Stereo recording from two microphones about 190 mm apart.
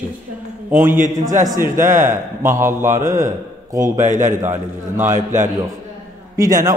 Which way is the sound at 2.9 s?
45° right (ahead or behind).